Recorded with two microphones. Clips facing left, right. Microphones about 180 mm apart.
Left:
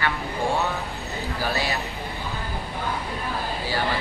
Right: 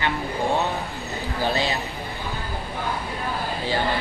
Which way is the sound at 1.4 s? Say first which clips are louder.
Right 3 dB; 25° right (ahead or behind).